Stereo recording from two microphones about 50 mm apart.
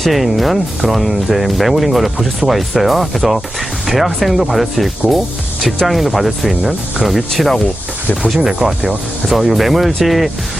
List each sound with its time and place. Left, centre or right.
0.0 s speech: centre
8.2 s speech: right; by 10.3 s centre